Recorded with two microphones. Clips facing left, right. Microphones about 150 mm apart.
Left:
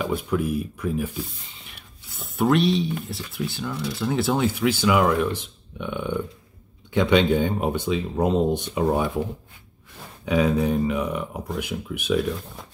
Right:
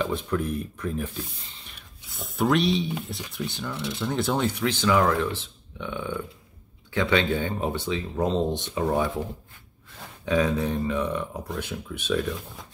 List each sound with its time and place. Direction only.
0.0 s speech: 10° left (ahead or behind)
3.7 s speech: 25° right (ahead or behind)
4.0 s speech: centre (ahead or behind)
10.2 s speech: 10° left (ahead or behind)